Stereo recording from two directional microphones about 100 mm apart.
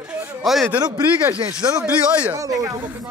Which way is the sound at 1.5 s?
45° right (ahead or behind).